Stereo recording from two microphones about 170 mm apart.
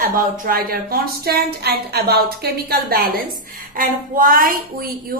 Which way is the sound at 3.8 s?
55° right (ahead or behind).